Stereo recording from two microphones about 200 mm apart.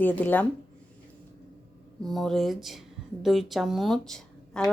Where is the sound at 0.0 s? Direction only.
10° left (ahead or behind).